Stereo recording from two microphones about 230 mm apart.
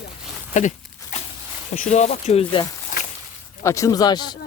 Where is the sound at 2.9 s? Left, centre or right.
Left.